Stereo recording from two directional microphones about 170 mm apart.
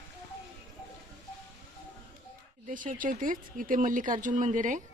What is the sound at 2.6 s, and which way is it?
Speech, 50° right (ahead or behind).